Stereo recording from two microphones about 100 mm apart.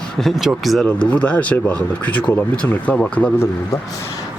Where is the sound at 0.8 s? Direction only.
15° left (ahead or behind).